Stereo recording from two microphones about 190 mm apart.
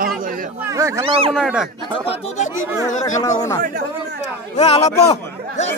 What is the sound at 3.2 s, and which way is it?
Speech, 15° left (ahead or behind).